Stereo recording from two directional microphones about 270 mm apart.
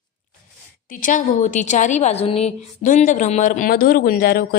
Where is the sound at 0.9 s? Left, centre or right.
Left.